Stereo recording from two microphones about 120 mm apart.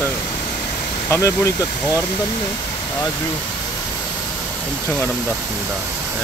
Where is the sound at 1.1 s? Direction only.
25° left (ahead or behind).